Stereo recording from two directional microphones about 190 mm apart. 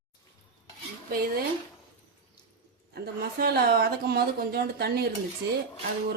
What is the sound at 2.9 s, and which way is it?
A woman's voice, 55° right (ahead or behind).